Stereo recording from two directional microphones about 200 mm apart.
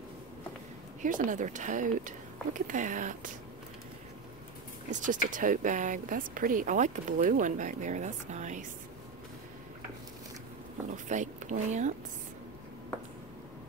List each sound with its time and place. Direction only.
1.0 s speech: 40° right (ahead or behind)
5.0 s speech: 40° right (ahead or behind)
10.9 s speech: 35° right (ahead or behind)